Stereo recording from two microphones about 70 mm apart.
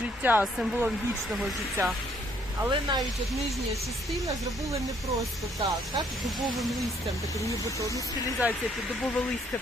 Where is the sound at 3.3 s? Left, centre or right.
Centre.